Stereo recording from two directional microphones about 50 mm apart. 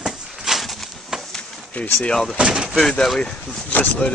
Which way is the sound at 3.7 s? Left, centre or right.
Left.